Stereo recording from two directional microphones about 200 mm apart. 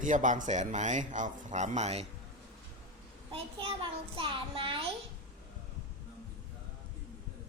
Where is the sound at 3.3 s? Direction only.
25° right (ahead or behind).